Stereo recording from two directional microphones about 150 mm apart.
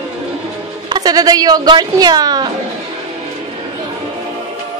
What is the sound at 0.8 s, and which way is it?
A woman's voice, 30° right (ahead or behind).